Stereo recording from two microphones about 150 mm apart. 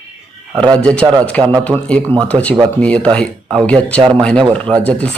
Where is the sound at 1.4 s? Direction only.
25° right (ahead or behind).